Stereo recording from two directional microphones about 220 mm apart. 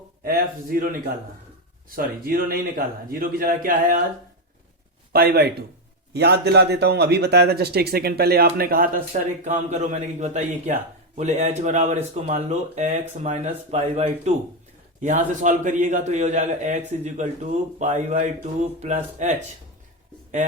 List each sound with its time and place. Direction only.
0.3 s a man's voice: 40° right (ahead or behind)
5.1 s a man's voice: 45° right (ahead or behind)